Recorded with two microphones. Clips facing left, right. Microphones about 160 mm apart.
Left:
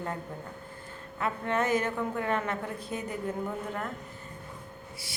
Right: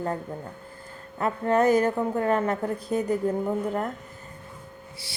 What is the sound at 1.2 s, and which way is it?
A woman's voice, 40° right (ahead or behind).